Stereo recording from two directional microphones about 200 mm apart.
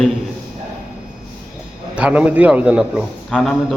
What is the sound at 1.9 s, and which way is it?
A man's voice, 5° right (ahead or behind).